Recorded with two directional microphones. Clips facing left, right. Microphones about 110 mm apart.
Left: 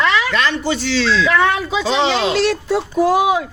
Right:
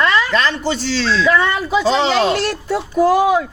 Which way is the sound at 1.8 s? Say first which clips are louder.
Right 2 dB; 45° right (ahead or behind).